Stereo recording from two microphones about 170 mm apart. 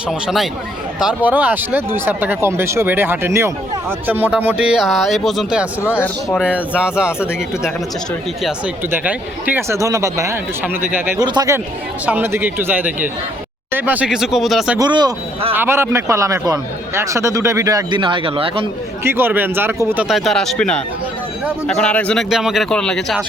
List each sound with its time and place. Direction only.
0.1 s speech: centre (ahead or behind)
6.0 s speech: 10° left (ahead or behind)
6.4 s speech: 5° right (ahead or behind)
14.8 s speech: 25° right (ahead or behind)
15.5 s speech: 15° right (ahead or behind); by 18.7 s 30° right (ahead or behind)
19.0 s speech: 15° right (ahead or behind)